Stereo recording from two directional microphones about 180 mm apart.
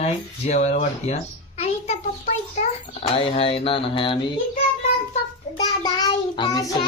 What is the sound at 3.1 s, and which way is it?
Speech, 30° left (ahead or behind).